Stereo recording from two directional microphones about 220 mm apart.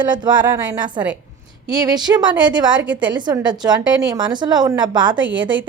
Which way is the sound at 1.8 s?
20° right (ahead or behind).